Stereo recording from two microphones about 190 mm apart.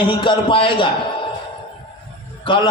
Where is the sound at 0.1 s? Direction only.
25° left (ahead or behind).